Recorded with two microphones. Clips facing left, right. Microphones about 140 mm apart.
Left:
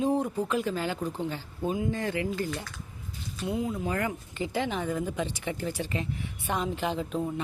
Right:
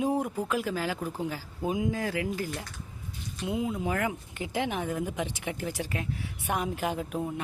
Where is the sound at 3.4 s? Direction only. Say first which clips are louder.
Even; 15° right (ahead or behind).